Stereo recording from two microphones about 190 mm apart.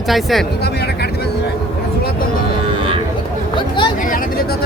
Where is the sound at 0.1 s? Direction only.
Centre (ahead or behind).